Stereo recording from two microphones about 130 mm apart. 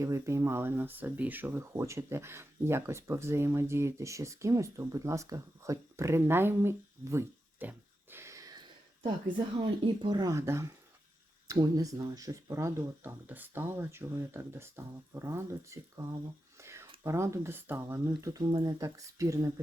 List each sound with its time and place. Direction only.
0.0 s speech: 20° right (ahead or behind)
9.6 s speech: 40° right (ahead or behind); by 16.0 s 20° right (ahead or behind)
16.6 s a sound: 20° right (ahead or behind)
17.0 s speech: 20° right (ahead or behind)